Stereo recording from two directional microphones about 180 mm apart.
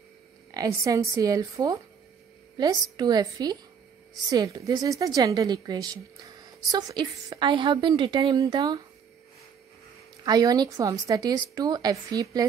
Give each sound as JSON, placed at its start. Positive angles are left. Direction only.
{"t": 0.6, "sound": "a woman's voice", "side_deg": -20}
{"t": 10.2, "sound": "speech", "side_deg": -20}